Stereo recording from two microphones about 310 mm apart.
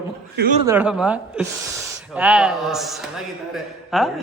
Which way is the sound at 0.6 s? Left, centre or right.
Centre.